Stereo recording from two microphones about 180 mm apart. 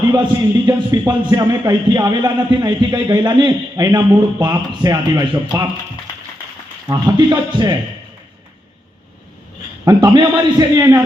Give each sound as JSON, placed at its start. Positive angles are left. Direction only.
{"t": 0.6, "sound": "speech", "side_deg": -20}
{"t": 6.8, "sound": "speech", "side_deg": -20}
{"t": 9.8, "sound": "speech", "side_deg": -20}